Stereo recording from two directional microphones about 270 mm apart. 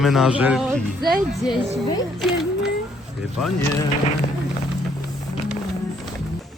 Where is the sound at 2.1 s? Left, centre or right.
Centre.